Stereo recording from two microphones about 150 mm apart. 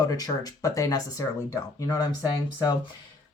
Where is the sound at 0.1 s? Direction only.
25° left (ahead or behind).